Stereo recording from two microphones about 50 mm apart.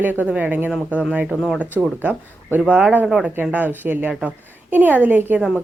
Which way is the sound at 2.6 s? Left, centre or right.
Right.